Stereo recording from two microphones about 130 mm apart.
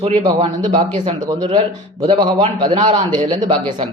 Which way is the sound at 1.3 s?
30° right (ahead or behind).